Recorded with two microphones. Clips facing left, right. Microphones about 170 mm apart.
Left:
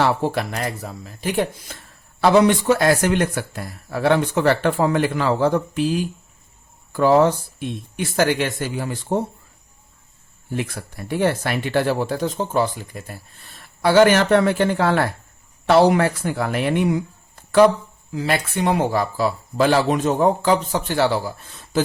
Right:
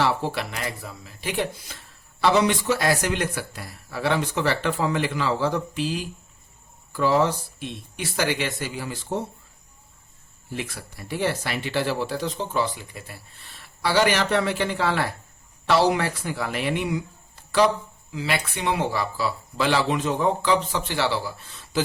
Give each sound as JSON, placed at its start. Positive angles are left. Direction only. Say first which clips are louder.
{"t": 0.0, "sound": "speech", "louder": "left 4 dB", "side_deg": 50}
{"t": 10.5, "sound": "speech", "louder": "left 6 dB", "side_deg": 50}
{"t": 18.1, "sound": "speech", "louder": "left 5 dB", "side_deg": 45}